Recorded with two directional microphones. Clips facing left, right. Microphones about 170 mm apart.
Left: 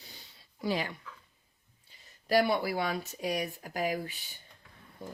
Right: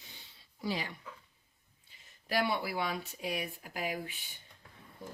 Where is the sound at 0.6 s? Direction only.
55° left (ahead or behind).